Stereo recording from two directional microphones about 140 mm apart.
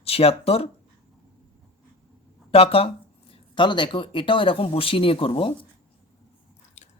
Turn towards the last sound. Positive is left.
turn(degrees=40)  # may be behind; listen again after turning